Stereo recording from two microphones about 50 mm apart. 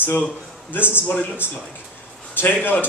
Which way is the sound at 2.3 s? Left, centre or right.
Left.